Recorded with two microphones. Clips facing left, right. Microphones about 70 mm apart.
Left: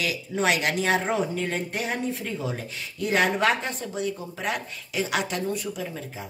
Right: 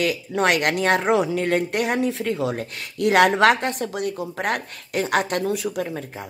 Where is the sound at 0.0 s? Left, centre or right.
Right.